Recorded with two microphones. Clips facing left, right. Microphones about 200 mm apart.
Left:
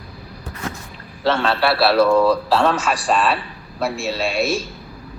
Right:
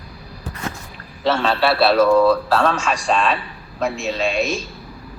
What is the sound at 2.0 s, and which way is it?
A man's voice, 10° left (ahead or behind).